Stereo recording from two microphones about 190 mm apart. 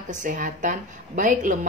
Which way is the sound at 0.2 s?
45° right (ahead or behind).